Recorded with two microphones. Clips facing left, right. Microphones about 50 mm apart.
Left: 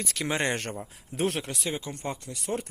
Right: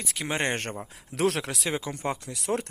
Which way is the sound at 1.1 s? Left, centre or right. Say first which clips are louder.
Right 3 dB; right.